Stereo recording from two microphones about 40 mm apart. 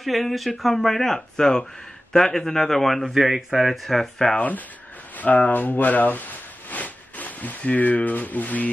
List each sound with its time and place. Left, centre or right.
0.0 s a man's voice: centre
3.2 s a man's voice: centre
4.4 s speech: left